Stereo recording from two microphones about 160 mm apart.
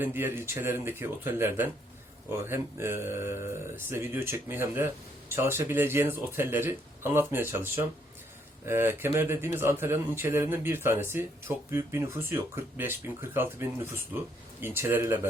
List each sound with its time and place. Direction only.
0.0 s a man's voice: 15° right (ahead or behind)